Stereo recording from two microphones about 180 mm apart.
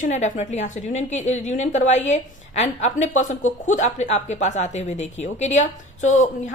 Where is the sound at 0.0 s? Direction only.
45° left (ahead or behind).